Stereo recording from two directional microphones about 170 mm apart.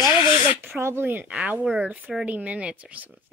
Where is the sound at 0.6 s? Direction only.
15° right (ahead or behind).